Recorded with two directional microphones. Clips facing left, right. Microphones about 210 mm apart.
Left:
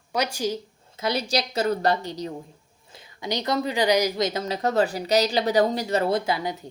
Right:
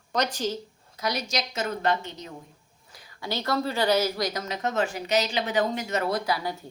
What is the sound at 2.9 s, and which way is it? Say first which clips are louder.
A woman's voice: left 3 dB; 25° left (ahead or behind).